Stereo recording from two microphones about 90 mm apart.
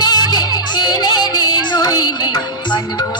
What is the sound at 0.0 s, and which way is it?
Music, 50° left (ahead or behind).